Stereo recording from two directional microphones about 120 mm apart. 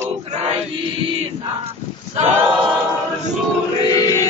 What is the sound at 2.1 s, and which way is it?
Choir, 65° right (ahead or behind).